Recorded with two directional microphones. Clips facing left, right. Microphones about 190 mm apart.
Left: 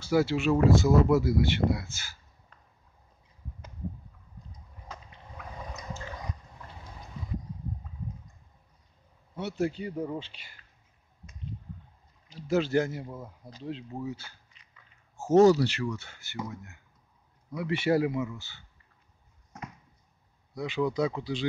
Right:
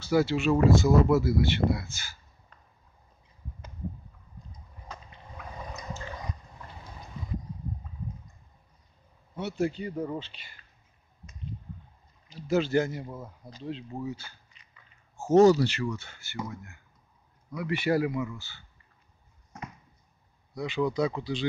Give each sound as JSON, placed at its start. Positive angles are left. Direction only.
{"t": 0.0, "sound": "speech", "side_deg": 5}
{"t": 1.1, "sound": "speech", "side_deg": 15}
{"t": 9.3, "sound": "speech", "side_deg": 0}
{"t": 12.4, "sound": "speech", "side_deg": 0}
{"t": 16.2, "sound": "speech", "side_deg": 20}
{"t": 20.5, "sound": "speech", "side_deg": 5}